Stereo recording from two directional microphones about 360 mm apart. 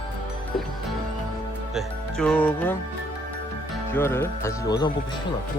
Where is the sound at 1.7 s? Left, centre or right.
Centre.